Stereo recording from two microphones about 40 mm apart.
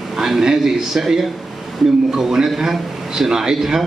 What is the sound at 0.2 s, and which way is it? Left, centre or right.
A man's voice, centre.